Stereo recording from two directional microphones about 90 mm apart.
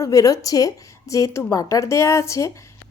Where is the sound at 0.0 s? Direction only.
40° left (ahead or behind).